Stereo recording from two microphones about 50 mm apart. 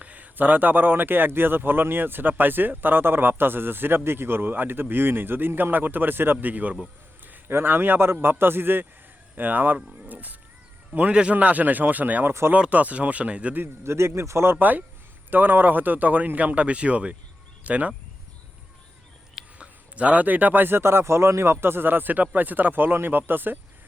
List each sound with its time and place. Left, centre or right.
0.0 s a man's voice: right
7.3 s a man's voice: right
10.1 s cat: right
11.1 s a man's voice: right
13.8 s speech: right
14.5 s a man's voice: right
19.5 s a man's voice: right